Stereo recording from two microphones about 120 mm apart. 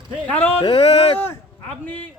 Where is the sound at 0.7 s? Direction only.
55° left (ahead or behind).